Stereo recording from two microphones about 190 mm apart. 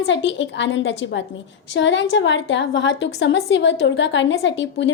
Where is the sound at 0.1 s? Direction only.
75° left (ahead or behind).